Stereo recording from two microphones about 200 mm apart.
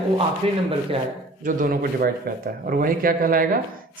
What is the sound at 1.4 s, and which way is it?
Speech, 40° right (ahead or behind).